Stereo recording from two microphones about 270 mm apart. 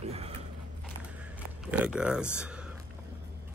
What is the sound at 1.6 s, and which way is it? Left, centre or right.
Speech, centre.